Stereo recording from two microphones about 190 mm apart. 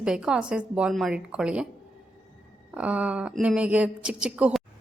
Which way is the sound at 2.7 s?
5° right (ahead or behind).